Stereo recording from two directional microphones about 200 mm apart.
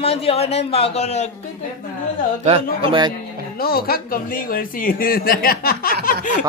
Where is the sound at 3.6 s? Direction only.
50° left (ahead or behind).